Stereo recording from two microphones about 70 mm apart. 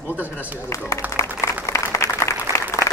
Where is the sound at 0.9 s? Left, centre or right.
Left.